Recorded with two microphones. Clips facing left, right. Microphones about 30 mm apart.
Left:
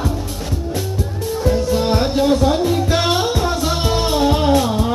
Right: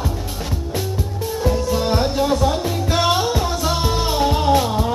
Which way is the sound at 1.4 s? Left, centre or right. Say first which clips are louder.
Left 3 dB; centre.